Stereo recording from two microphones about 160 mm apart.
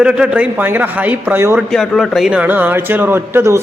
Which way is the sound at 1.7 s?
Centre (ahead or behind).